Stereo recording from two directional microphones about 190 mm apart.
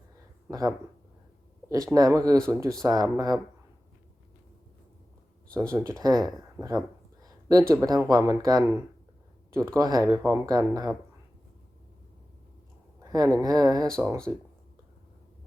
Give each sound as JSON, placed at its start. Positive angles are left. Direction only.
{"t": 0.4, "sound": "speech", "side_deg": -20}
{"t": 1.7, "sound": "speech", "side_deg": -20}
{"t": 5.5, "sound": "speech", "side_deg": -15}
{"t": 6.0, "sound": "a sound", "side_deg": -20}
{"t": 7.7, "sound": "speech", "side_deg": -20}
{"t": 13.1, "sound": "speech", "side_deg": -20}
{"t": 13.8, "sound": "speech", "side_deg": 5}